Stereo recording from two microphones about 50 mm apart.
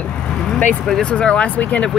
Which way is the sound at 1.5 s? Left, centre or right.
Left.